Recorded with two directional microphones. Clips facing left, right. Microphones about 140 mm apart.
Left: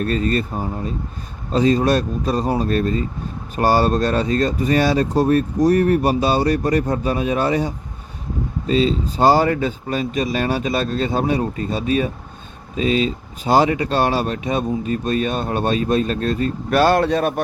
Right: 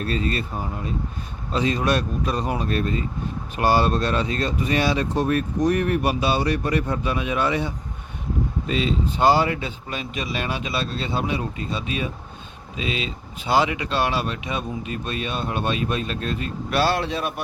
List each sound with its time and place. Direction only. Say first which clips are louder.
0.0 s speech: left 5 dB; 45° left (ahead or behind)